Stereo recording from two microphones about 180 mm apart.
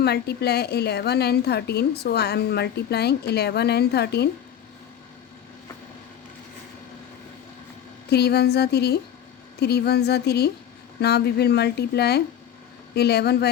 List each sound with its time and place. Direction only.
0.0 s a woman's voice: 65° left (ahead or behind)
8.1 s a woman's voice: 65° left (ahead or behind)